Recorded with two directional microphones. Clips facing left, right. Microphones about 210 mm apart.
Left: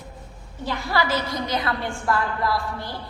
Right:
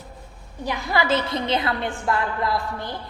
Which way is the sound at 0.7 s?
20° right (ahead or behind).